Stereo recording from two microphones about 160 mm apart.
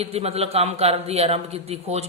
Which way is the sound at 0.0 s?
40° right (ahead or behind).